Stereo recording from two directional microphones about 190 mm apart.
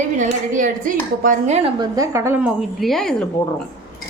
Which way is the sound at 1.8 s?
15° right (ahead or behind).